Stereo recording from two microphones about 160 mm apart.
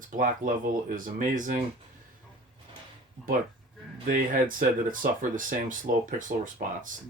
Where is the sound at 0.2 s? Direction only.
55° right (ahead or behind).